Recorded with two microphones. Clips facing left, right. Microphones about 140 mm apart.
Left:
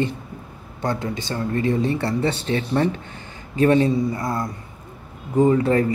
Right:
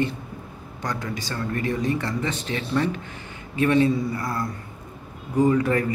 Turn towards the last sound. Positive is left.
turn(degrees=30)  # may be behind; listen again after turning